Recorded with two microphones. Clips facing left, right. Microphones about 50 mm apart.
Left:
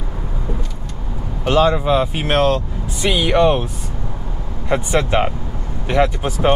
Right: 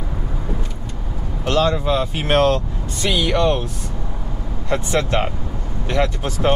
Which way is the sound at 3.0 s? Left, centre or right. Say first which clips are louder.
Left 3 dB; centre.